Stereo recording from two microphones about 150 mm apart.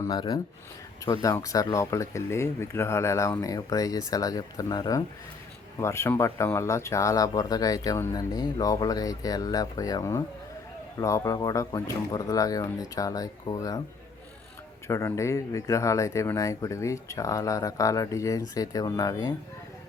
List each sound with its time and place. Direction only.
0.0 s speech: 30° left (ahead or behind)
14.8 s speech: 20° left (ahead or behind)